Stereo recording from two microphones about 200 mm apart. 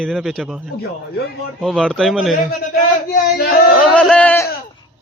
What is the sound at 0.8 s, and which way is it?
Speech, 55° left (ahead or behind).